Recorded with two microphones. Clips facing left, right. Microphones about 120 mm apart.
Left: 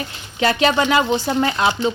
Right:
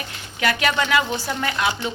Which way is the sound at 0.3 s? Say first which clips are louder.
Left 5 dB; 25° left (ahead or behind).